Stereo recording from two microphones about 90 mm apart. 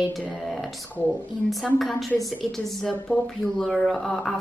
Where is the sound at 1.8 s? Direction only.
Centre (ahead or behind).